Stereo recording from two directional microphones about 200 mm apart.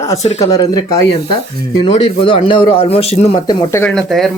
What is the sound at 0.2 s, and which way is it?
Speech, 35° left (ahead or behind).